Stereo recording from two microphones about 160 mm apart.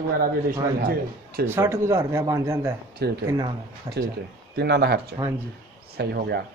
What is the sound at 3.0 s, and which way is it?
Speech, 90° right.